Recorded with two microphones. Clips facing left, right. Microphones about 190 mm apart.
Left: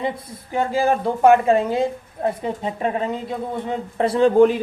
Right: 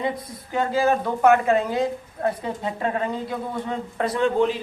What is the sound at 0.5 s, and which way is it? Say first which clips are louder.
Speech: left 1 dB; 30° left (ahead or behind).